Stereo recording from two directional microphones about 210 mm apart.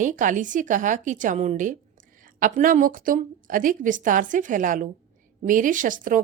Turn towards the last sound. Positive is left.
turn(degrees=-40)  # may be behind; listen again after turning